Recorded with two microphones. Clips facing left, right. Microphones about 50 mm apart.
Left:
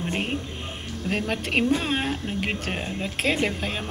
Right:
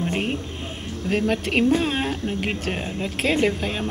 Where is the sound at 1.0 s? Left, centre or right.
Centre.